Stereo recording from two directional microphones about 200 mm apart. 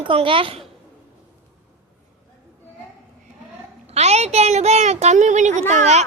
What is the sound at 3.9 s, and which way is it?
Child singing, 30° right (ahead or behind).